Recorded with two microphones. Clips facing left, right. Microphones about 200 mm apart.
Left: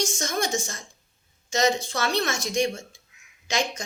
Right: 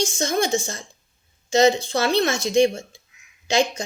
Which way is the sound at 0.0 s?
30° right (ahead or behind).